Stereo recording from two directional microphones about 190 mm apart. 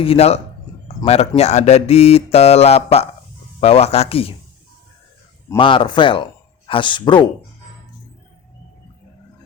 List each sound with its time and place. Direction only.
0.0 s speech: 30° left (ahead or behind)
5.5 s speech: 25° left (ahead or behind)